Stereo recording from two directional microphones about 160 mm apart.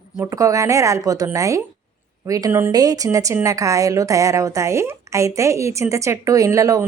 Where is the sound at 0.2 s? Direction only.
20° right (ahead or behind).